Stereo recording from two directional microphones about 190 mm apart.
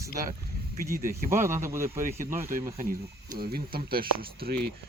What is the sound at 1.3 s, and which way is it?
Speech, 40° right (ahead or behind).